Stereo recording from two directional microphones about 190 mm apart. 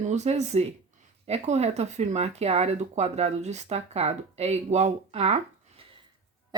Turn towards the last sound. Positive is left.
turn(degrees=-35)  # may be behind; listen again after turning